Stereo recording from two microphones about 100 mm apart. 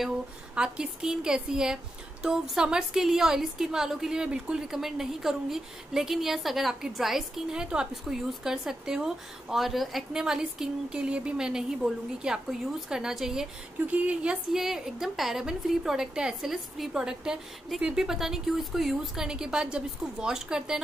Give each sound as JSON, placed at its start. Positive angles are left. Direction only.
{"t": 0.6, "sound": "a woman's voice", "side_deg": -5}